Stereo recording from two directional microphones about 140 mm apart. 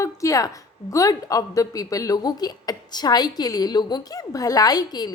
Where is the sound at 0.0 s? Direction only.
25° left (ahead or behind).